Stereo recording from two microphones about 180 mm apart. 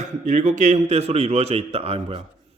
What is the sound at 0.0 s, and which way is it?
A man's voice, 45° right (ahead or behind).